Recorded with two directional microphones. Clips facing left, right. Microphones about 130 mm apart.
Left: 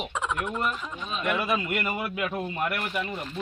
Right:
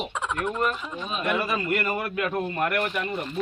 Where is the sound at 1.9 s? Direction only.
55° right (ahead or behind).